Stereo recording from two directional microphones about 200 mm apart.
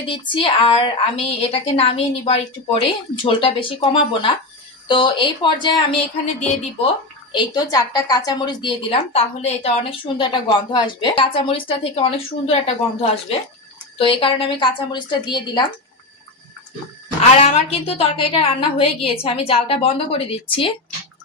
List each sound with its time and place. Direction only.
0.1 s a woman's voice: 25° left (ahead or behind)
7.3 s a woman's voice: 20° left (ahead or behind)
17.2 s a woman's voice: 30° left (ahead or behind)